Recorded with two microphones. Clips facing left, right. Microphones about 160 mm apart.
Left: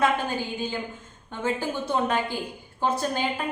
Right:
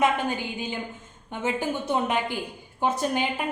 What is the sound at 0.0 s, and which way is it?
A woman's voice, 20° right (ahead or behind).